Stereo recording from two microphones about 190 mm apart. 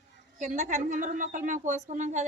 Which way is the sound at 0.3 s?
35° right (ahead or behind).